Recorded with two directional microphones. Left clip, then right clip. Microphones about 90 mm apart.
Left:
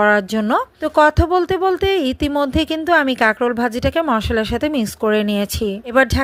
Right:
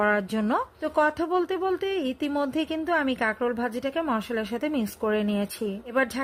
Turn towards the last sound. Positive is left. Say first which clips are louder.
# left 11 dB
turn(degrees=55)  # may be behind; listen again after turning